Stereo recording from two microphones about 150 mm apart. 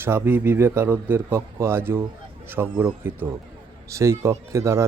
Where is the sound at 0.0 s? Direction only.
15° right (ahead or behind).